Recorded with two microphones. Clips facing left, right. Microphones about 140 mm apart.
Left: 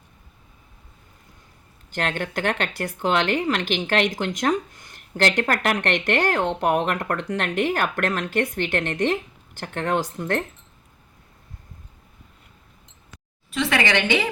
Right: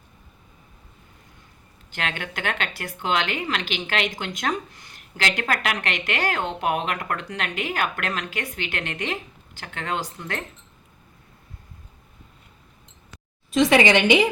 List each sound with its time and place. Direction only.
1.9 s speech: 45° left (ahead or behind)
13.5 s speech: 20° right (ahead or behind)